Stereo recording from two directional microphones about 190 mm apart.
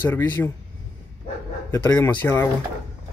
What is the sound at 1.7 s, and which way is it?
Speech, 10° left (ahead or behind).